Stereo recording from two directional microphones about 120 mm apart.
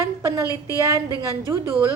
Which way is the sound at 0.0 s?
25° right (ahead or behind).